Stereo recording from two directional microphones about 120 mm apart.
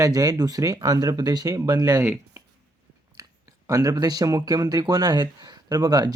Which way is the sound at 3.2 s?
30° right (ahead or behind).